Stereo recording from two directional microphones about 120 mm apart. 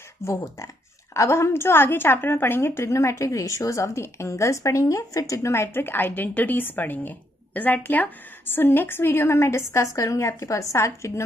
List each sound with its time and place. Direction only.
0.2 s a woman's voice: 25° left (ahead or behind)